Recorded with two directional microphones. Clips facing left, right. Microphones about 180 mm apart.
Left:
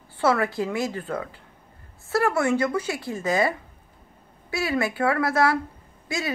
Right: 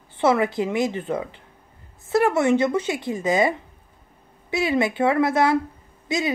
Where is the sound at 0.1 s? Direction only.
20° right (ahead or behind).